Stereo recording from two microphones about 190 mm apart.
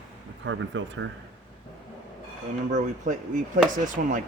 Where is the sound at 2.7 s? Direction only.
40° right (ahead or behind).